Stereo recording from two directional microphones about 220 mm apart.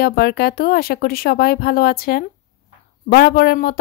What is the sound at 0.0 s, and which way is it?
Speech, 45° left (ahead or behind).